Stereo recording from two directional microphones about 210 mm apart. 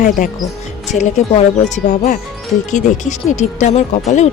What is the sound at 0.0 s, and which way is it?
Speech, 40° left (ahead or behind).